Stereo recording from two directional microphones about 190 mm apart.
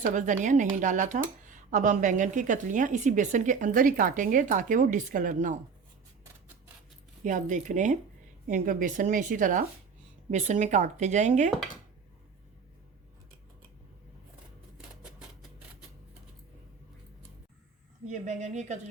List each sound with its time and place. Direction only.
0.0 s speech: 40° right (ahead or behind)
7.3 s speech: 40° right (ahead or behind)
18.1 s speech: 40° right (ahead or behind)